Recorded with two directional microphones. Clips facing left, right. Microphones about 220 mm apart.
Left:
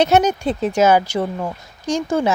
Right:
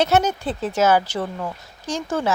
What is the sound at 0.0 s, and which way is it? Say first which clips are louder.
A woman's voice: left 4 dB; 15° left (ahead or behind).